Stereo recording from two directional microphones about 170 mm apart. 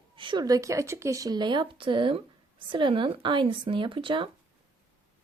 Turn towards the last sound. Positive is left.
turn(degrees=-30)  # may be behind; listen again after turning